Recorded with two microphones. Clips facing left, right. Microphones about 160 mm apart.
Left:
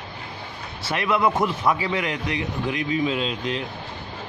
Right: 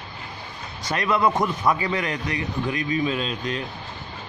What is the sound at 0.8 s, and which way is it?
Speech, 5° left (ahead or behind).